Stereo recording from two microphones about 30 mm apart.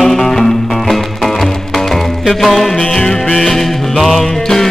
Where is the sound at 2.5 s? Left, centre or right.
Centre.